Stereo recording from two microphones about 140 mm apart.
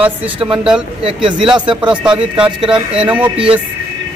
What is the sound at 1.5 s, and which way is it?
Speech, 35° right (ahead or behind).